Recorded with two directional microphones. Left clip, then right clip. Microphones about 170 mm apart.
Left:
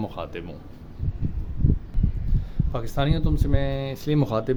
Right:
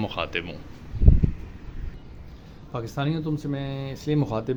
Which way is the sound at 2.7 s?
20° left (ahead or behind).